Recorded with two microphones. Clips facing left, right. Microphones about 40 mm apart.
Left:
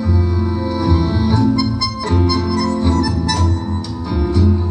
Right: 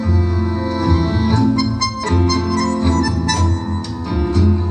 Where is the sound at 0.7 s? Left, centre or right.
Right.